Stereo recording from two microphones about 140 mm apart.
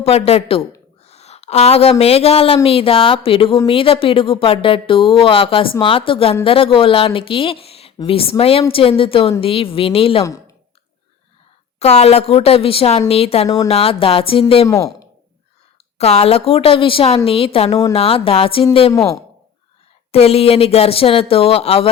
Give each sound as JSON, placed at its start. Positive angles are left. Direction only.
{"t": 0.0, "sound": "a woman's voice", "side_deg": 45}
{"t": 10.2, "sound": "speech", "side_deg": 25}
{"t": 11.8, "sound": "speech", "side_deg": 50}
{"t": 16.0, "sound": "speech", "side_deg": 50}
{"t": 20.1, "sound": "speech", "side_deg": 45}